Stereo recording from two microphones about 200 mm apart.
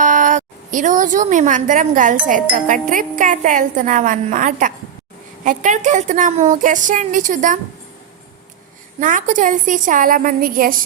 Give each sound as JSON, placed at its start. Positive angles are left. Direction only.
{"t": 0.0, "sound": "a woman's voice", "side_deg": -40}
{"t": 9.0, "sound": "speech", "side_deg": -40}